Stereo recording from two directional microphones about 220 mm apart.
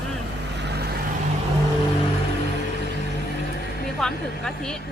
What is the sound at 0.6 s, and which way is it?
Vehicle, 50° right (ahead or behind).